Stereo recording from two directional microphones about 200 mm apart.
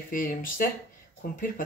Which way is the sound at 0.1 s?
45° left (ahead or behind).